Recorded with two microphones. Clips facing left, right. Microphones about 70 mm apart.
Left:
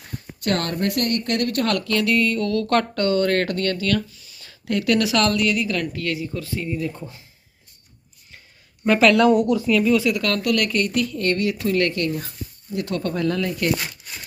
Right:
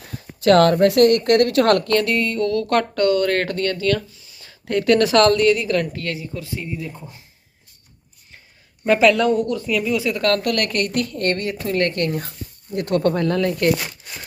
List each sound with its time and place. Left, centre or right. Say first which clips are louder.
0.4 s a woman's voice: right 10 dB; right
2.0 s speech: even; right
2.7 s speech: right 2 dB; centre
3.6 s speech: right 2 dB; right
9.3 s speech: left 2 dB; centre
9.6 s speech: left 3 dB; centre
10.2 s a woman's voice: right 2 dB; right
11.4 s speech: left 1 dB; right
11.9 s a woman's voice: right 2 dB; right
13.1 s speech: right 3 dB; right